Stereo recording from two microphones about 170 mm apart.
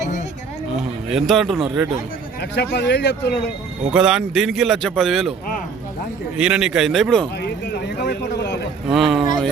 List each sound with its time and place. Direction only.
1.1 s a man's voice: centre (ahead or behind)
2.4 s speech: 80° left
3.9 s a man's voice: 5° right (ahead or behind)
6.3 s a man's voice: 5° right (ahead or behind)
7.4 s vehicle: 75° left (ahead or behind)
8.9 s a sound: centre (ahead or behind)